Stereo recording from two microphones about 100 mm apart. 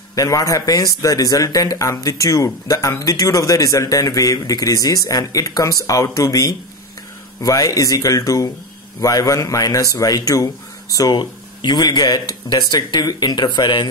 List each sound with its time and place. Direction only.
0.1 s speech: 35° left (ahead or behind)